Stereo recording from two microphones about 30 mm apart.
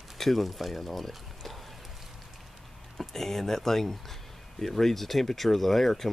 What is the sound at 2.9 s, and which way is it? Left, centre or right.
Speech, centre.